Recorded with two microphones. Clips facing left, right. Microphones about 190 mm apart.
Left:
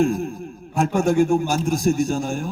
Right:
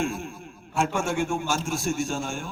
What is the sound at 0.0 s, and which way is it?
A man's voice, 40° left (ahead or behind).